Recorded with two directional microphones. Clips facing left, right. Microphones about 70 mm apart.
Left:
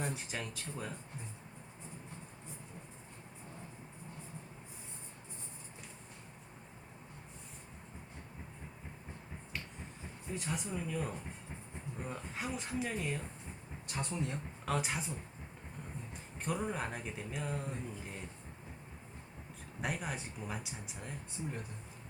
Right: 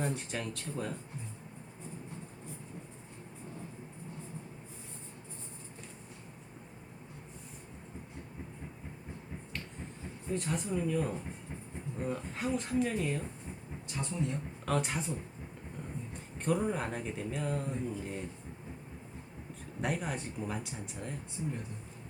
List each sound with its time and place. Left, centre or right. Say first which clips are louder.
0.0 s speech: right 4 dB; centre
10.3 s speech: right 6 dB; centre
13.8 s speech: right 1 dB; left
14.6 s speech: right 3 dB; centre
16.1 s speech: right 6 dB; centre
19.8 s speech: right 4 dB; centre